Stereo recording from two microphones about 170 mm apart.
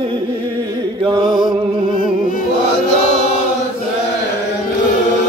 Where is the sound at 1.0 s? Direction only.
30° right (ahead or behind).